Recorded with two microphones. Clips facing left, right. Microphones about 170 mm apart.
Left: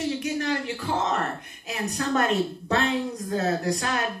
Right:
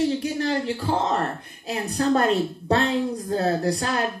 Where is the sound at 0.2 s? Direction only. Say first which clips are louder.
Right 3 dB; 35° right (ahead or behind).